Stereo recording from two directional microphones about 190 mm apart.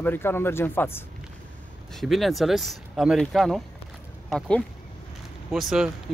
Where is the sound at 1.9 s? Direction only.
Centre (ahead or behind).